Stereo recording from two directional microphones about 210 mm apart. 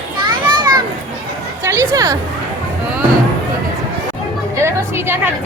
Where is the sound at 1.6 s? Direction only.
15° right (ahead or behind).